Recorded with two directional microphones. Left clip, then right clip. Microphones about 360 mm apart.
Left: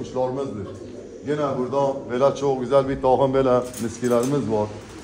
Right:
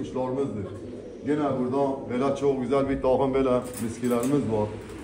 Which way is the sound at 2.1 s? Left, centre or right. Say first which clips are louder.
Left 5 dB; left.